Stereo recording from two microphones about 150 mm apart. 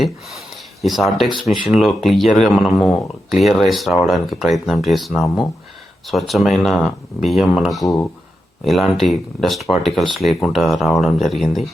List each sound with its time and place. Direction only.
0.0 s speech: centre (ahead or behind)
7.9 s speech: 15° left (ahead or behind)
8.6 s speech: centre (ahead or behind)